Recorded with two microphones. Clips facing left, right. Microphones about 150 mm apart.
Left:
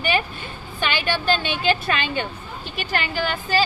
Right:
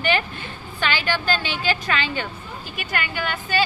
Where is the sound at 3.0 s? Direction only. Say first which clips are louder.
Even; 30° left (ahead or behind).